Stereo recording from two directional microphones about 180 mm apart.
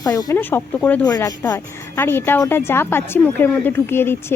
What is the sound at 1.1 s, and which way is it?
Speech, 20° left (ahead or behind).